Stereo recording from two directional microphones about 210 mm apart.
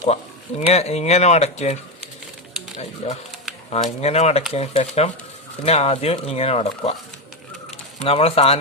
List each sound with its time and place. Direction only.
0.0 s speech: 30° left (ahead or behind)
8.0 s speech: 30° left (ahead or behind)